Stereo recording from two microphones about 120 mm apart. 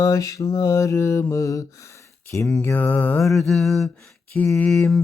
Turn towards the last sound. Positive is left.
turn(degrees=5)  # may be behind; listen again after turning